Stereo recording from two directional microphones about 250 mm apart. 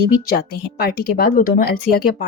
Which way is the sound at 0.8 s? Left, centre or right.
Left.